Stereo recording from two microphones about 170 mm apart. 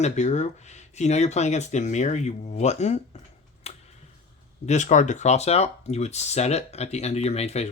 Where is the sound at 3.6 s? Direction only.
35° left (ahead or behind).